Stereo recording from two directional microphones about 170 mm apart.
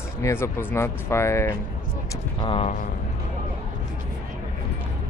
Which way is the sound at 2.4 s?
35° left (ahead or behind).